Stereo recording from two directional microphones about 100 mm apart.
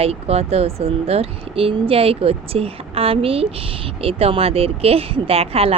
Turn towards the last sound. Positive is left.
turn(degrees=-75)  # may be behind; listen again after turning